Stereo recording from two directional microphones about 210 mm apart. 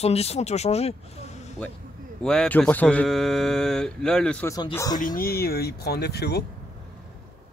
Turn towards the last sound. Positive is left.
turn(degrees=50)  # may be behind; listen again after turning